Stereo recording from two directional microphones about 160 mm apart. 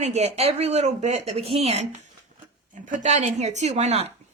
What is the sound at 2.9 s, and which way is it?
A woman's voice, 45° right (ahead or behind).